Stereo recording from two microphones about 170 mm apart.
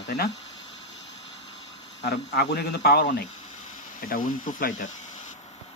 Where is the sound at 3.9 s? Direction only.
55° left (ahead or behind).